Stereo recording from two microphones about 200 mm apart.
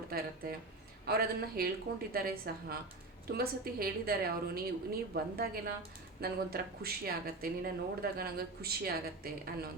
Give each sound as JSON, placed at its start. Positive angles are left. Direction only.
{"t": 0.1, "sound": "speech", "side_deg": -50}